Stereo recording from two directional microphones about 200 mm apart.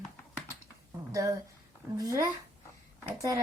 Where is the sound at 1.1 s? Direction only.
15° right (ahead or behind).